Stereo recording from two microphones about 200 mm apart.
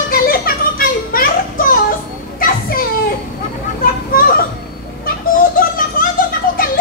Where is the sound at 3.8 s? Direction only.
45° left (ahead or behind).